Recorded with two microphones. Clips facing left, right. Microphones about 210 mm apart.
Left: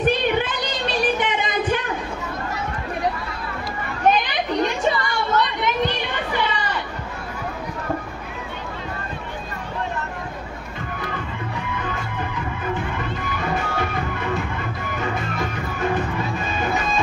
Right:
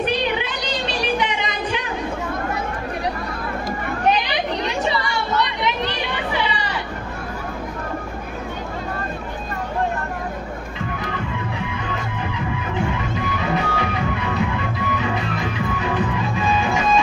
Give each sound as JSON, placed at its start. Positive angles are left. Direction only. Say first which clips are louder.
{"t": 0.0, "sound": "a sound", "louder": "left 2 dB", "side_deg": 50}
{"t": 4.1, "sound": "chatter", "louder": "even", "side_deg": 50}
{"t": 12.5, "sound": "music", "louder": "right 1 dB", "side_deg": 50}